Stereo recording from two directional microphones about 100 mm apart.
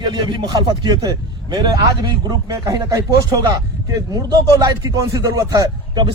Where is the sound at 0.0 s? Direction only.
50° right (ahead or behind).